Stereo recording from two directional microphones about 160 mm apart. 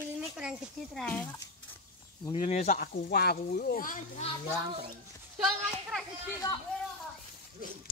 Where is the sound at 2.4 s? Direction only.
45° left (ahead or behind).